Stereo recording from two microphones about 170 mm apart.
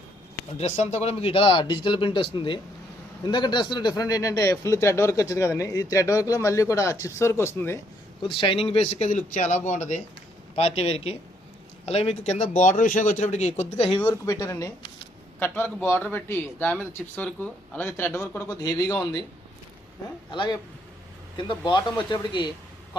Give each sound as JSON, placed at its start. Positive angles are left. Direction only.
{"t": 0.6, "sound": "speech", "side_deg": 40}
{"t": 8.3, "sound": "speech", "side_deg": 30}
{"t": 14.1, "sound": "speech", "side_deg": 20}
{"t": 20.3, "sound": "speech", "side_deg": 30}